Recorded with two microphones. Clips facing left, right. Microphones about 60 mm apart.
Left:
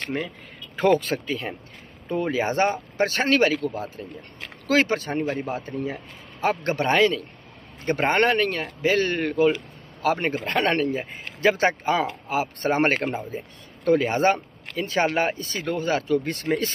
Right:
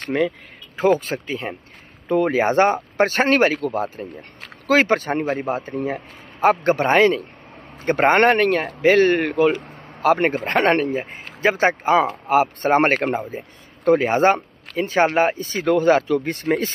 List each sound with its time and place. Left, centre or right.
0.1 s speech: right
0.9 s speech: right
2.0 s a man's voice: right
3.5 s speech: right
4.6 s a man's voice: right
10.3 s a man's voice: right
15.8 s speech: right